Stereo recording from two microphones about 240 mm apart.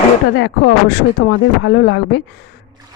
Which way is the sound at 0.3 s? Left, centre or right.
Left.